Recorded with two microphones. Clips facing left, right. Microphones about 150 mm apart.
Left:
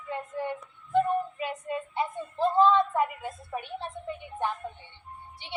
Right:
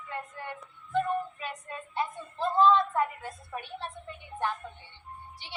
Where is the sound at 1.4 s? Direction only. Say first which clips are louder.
Left 7 dB; 20° left (ahead or behind).